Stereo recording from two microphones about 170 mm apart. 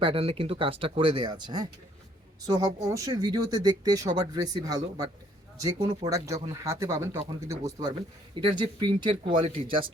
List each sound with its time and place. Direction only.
0.0 s speech: 35° right (ahead or behind); by 7.6 s 15° right (ahead or behind)
8.6 s speech: 30° right (ahead or behind)